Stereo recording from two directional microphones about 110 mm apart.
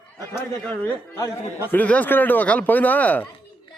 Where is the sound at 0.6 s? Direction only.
15° left (ahead or behind).